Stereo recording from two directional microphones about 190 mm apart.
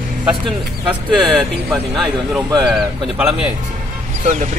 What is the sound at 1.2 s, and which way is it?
Speech, centre (ahead or behind).